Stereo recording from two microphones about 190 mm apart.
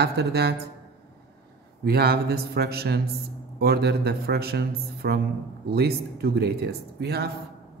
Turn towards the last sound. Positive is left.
turn(degrees=-55)  # may be behind; listen again after turning